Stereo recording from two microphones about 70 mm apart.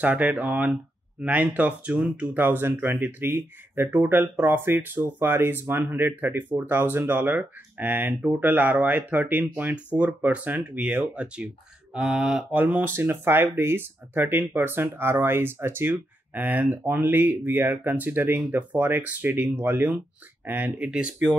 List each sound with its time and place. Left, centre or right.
0.0 s speech: right
12.5 s speech: right; by 21.4 s centre